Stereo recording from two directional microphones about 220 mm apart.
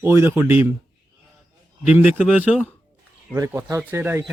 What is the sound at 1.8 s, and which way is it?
Speech, 5° right (ahead or behind).